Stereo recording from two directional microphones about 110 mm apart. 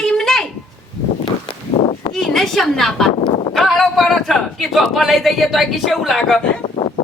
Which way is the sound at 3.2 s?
55° left (ahead or behind).